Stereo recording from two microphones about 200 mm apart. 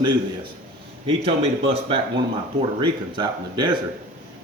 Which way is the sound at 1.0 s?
30° right (ahead or behind).